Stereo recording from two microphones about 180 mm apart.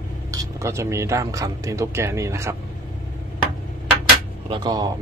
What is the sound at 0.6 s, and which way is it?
Speech, 15° right (ahead or behind).